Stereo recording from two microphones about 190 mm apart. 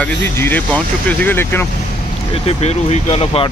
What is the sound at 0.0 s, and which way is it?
A man's voice, 10° left (ahead or behind).